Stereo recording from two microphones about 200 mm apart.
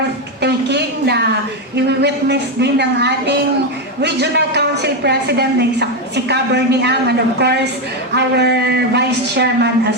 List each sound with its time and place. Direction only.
0.4 s a woman's voice: 55° right (ahead or behind)